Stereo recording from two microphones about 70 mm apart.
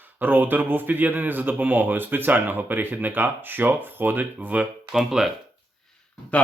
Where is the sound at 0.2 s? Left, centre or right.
Right.